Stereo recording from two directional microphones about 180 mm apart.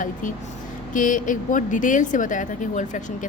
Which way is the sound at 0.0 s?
45° left (ahead or behind).